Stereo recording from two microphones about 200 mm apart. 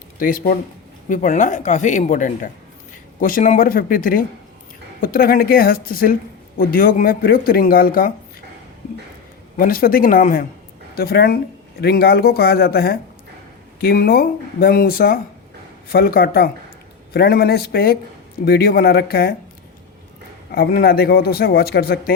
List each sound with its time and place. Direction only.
0.2 s speech: 45° left (ahead or behind)
9.6 s speech: 45° left (ahead or behind)
20.5 s speech: 50° left (ahead or behind)